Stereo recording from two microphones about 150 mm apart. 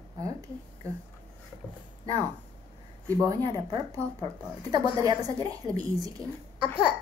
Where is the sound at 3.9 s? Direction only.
15° left (ahead or behind).